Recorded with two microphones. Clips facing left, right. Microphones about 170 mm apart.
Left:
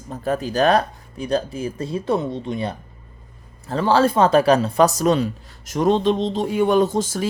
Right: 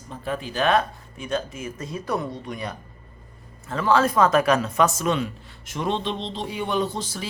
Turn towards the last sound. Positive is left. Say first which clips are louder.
# left 8 dB
turn(degrees=45)  # may be behind; listen again after turning